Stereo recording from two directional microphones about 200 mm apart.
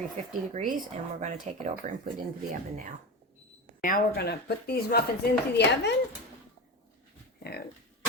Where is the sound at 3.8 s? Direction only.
50° left (ahead or behind).